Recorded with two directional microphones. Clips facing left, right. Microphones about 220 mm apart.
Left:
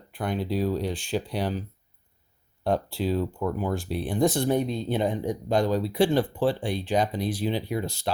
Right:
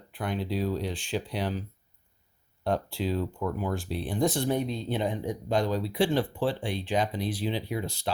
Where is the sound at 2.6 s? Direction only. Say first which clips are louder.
Left 3 dB; 35° left (ahead or behind).